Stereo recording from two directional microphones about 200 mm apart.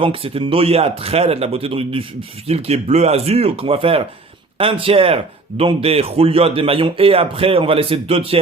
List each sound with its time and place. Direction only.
0.0 s speech: 25° right (ahead or behind)